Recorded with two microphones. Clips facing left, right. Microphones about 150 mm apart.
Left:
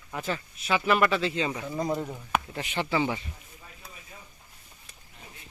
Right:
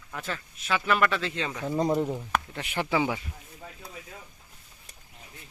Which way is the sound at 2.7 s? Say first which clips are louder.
Right 1 dB; 10° right (ahead or behind).